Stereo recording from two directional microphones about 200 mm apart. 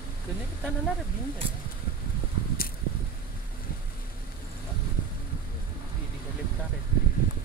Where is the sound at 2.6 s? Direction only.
45° left (ahead or behind).